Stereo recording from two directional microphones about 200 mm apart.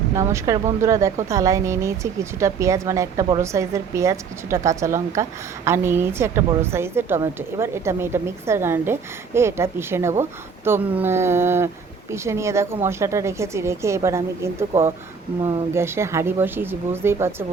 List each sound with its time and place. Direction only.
0.2 s speech: 15° right (ahead or behind)